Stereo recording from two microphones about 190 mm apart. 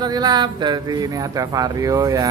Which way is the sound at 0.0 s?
20° right (ahead or behind).